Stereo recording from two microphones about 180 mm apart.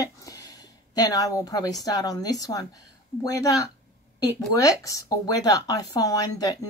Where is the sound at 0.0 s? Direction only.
20° left (ahead or behind).